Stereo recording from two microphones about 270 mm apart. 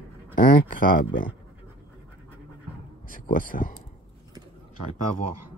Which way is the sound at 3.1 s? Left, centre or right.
Left.